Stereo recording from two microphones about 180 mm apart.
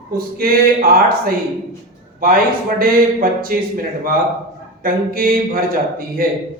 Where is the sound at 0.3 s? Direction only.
55° right (ahead or behind).